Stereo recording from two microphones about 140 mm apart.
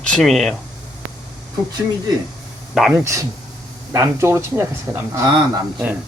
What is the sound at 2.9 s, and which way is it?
Speech, 20° right (ahead or behind).